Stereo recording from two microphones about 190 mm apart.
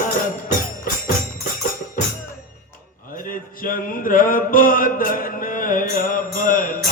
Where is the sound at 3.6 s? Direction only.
45° left (ahead or behind).